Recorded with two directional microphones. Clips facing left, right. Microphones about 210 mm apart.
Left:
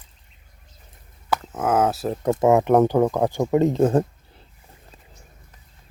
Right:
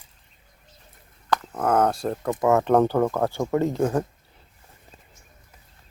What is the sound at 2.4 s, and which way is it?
Speech, 15° left (ahead or behind).